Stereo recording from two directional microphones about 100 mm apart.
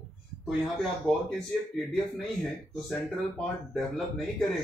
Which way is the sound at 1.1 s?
Centre (ahead or behind).